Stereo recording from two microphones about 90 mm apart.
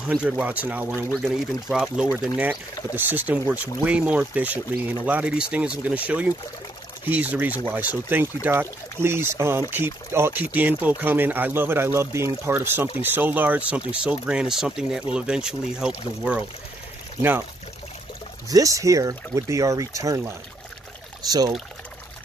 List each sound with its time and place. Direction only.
0.1 s speech: 15° right (ahead or behind)
1.2 s speech: 5° right (ahead or behind)
18.5 s speech: 40° right (ahead or behind)